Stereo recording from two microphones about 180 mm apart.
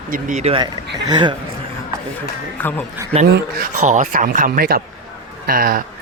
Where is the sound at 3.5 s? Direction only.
40° right (ahead or behind).